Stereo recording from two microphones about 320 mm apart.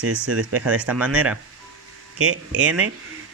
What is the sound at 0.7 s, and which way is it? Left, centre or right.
Speech, centre.